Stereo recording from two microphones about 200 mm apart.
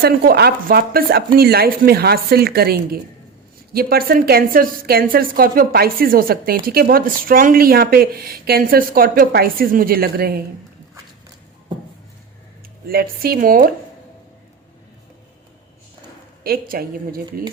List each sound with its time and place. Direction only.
0.0 s a woman's voice: 50° right (ahead or behind)
12.9 s a woman's voice: 50° right (ahead or behind)
16.4 s a woman's voice: 50° right (ahead or behind)